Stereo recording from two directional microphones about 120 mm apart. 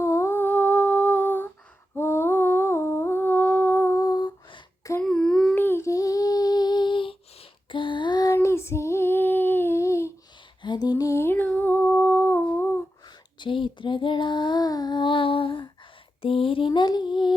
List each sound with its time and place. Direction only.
0.0 s humming: 25° left (ahead or behind)
5.0 s a sound: 5° left (ahead or behind)
5.5 s humming: 20° left (ahead or behind); by 7.2 s 45° left (ahead or behind)
7.7 s female singing: 45° left (ahead or behind); by 10.1 s 25° left (ahead or behind)
10.6 s humming: 35° left (ahead or behind); by 12.8 s 15° left (ahead or behind)
13.4 s child singing: 45° left (ahead or behind)
16.2 s a sound: 50° left (ahead or behind)